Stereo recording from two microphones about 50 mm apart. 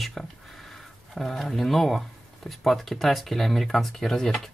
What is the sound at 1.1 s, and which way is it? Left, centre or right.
Speech, centre.